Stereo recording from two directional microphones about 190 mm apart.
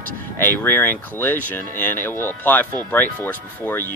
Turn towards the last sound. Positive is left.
turn(degrees=10)  # may be behind; listen again after turning